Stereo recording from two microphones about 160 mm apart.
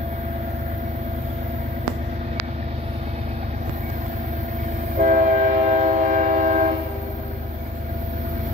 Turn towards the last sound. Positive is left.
turn(degrees=-50)  # may be behind; listen again after turning